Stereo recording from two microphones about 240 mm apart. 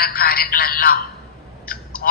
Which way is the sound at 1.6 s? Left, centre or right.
Left.